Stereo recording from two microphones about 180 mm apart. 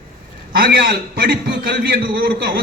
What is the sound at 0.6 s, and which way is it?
A man's voice, 60° right (ahead or behind).